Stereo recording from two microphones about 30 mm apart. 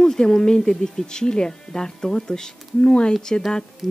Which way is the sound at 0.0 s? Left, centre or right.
Left.